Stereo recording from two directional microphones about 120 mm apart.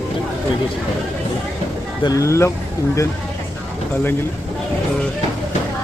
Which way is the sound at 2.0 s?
25° left (ahead or behind).